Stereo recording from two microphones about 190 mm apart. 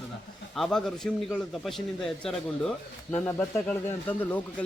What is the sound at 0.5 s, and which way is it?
A man's voice, centre (ahead or behind).